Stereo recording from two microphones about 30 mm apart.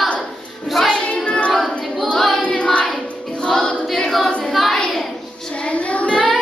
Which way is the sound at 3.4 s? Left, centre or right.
Left.